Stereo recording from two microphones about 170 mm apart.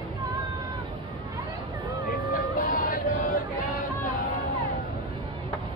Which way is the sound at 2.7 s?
50° left (ahead or behind).